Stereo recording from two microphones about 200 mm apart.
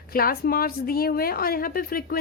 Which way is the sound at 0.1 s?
45° left (ahead or behind).